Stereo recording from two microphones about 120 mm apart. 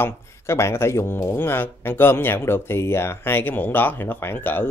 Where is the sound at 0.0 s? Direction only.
20° left (ahead or behind).